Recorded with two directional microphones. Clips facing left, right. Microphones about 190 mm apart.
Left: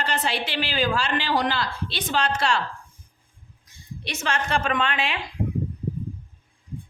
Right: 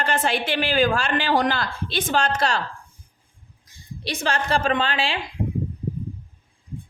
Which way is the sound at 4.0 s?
35° right (ahead or behind).